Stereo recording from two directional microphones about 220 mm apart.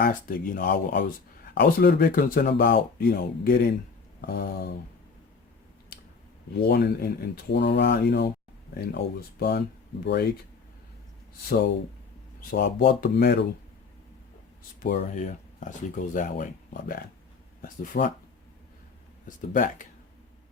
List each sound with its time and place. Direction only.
0.0 s speech: 40° left (ahead or behind)
6.6 s speech: 45° left (ahead or behind)
12.5 s speech: 40° left (ahead or behind)
14.8 s speech: 40° left (ahead or behind)
19.5 s speech: 35° left (ahead or behind)